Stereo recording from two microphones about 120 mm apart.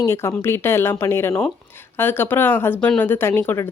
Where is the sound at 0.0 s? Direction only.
20° left (ahead or behind).